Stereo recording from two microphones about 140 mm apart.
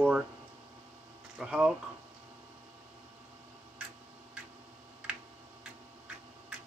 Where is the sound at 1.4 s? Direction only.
5° right (ahead or behind).